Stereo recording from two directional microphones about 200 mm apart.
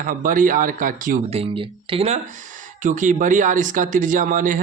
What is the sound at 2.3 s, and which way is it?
Speech, 40° right (ahead or behind).